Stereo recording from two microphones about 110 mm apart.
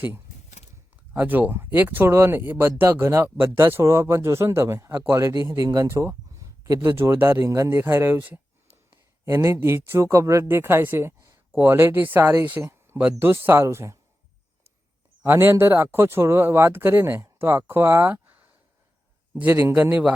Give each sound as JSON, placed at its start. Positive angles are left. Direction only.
{"t": 1.1, "sound": "speech", "side_deg": -15}
{"t": 15.2, "sound": "a man's voice", "side_deg": -20}